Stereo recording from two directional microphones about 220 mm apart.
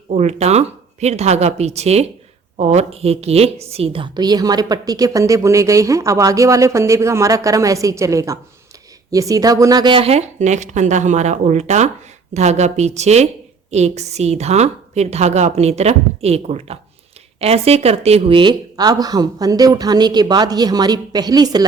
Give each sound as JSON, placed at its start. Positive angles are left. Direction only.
{"t": 0.1, "sound": "a woman's voice", "side_deg": -30}